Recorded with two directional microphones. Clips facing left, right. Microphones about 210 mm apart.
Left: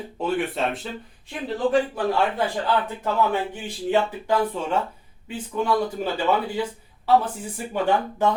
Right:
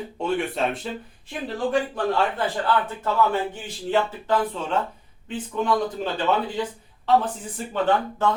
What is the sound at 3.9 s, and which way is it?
Speech, 10° left (ahead or behind).